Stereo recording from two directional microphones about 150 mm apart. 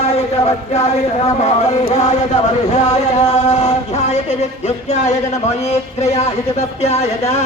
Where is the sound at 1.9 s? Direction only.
50° left (ahead or behind).